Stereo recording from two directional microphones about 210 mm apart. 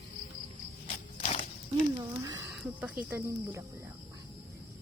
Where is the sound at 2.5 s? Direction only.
5° right (ahead or behind).